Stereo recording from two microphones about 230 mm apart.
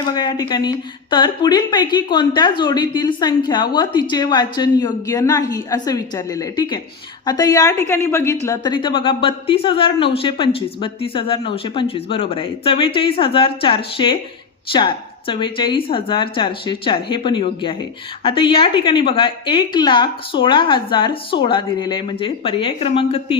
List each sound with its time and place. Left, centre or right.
0.0 s a woman's voice: centre